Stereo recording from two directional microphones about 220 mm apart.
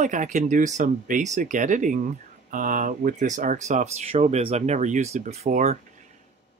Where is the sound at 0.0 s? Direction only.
35° right (ahead or behind).